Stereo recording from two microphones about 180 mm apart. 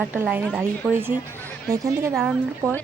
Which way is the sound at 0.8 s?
Centre (ahead or behind).